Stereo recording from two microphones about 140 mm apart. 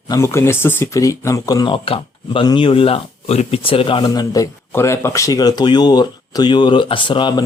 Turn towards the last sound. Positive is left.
turn(degrees=35)  # may be behind; listen again after turning